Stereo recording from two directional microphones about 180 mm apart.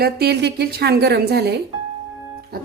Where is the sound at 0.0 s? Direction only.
65° right (ahead or behind).